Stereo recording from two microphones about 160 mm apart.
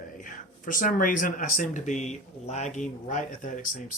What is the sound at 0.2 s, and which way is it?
Speech, 55° left (ahead or behind).